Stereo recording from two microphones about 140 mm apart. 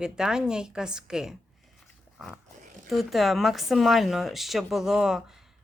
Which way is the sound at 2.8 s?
Centre (ahead or behind).